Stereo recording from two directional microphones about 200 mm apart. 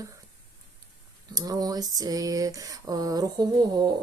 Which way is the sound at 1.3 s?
20° right (ahead or behind).